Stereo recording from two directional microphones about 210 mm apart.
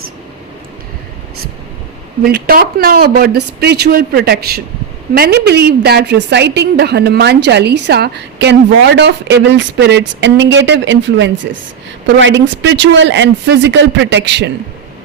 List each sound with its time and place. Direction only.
2.2 s a woman's voice: 45° right (ahead or behind)